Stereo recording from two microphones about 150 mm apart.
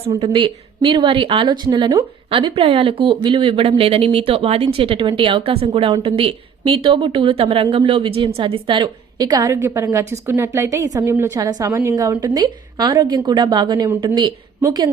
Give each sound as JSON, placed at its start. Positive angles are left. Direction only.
{"t": 0.1, "sound": "a woman's voice", "side_deg": -35}